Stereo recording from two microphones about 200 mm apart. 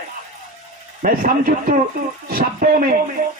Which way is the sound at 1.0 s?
45° right (ahead or behind).